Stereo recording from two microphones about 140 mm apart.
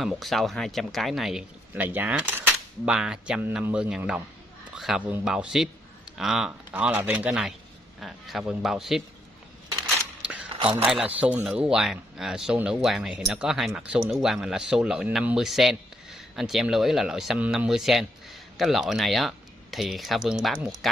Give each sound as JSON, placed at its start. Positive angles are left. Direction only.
{"t": 0.0, "sound": "speech", "side_deg": 0}
{"t": 1.7, "sound": "cutlery", "side_deg": -10}
{"t": 4.7, "sound": "speech", "side_deg": -5}
{"t": 6.1, "sound": "cutlery", "side_deg": -5}
{"t": 8.0, "sound": "speech", "side_deg": 0}
{"t": 10.5, "sound": "a sound", "side_deg": -40}
{"t": 10.8, "sound": "speech", "side_deg": -10}